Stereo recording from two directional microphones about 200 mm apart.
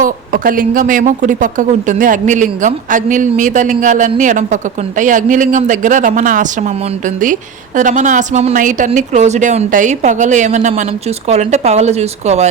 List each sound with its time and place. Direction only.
0.0 s speech: 45° right (ahead or behind)
7.8 s speech: 40° right (ahead or behind)